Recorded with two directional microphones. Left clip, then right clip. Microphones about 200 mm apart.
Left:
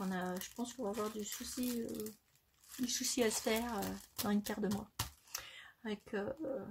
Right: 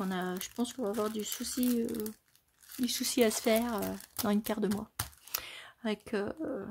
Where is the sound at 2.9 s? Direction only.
35° right (ahead or behind).